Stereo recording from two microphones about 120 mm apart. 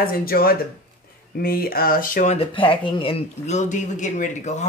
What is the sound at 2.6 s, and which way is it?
Speech, 45° left (ahead or behind).